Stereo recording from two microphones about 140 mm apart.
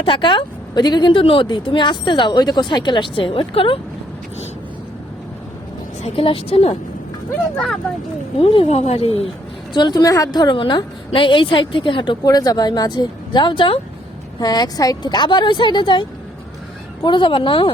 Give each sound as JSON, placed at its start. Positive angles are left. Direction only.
{"t": 0.0, "sound": "a woman's voice", "side_deg": 35}
{"t": 6.0, "sound": "speech", "side_deg": 40}
{"t": 8.4, "sound": "speech", "side_deg": 40}
{"t": 9.7, "sound": "a woman's voice", "side_deg": 30}